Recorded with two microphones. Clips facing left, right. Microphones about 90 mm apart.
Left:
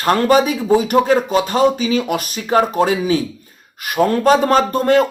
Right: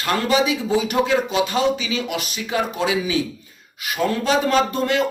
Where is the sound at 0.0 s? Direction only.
45° left (ahead or behind).